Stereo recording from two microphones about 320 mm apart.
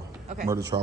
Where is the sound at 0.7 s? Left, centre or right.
Centre.